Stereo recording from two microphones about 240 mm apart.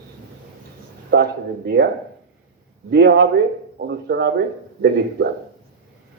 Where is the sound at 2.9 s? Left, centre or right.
Right.